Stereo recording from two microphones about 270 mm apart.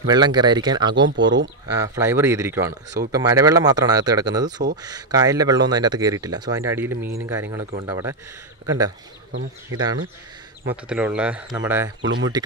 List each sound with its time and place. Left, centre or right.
0.1 s speech: centre
1.0 s speech: right
1.8 s speech: centre
6.9 s speech: right
7.2 s speech: centre
10.7 s speech: centre